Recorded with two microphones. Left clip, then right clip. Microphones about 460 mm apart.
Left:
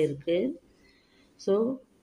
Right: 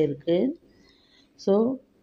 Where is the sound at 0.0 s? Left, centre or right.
Right.